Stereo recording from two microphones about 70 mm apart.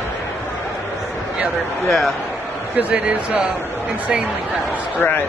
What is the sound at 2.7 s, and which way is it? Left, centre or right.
Speech, centre.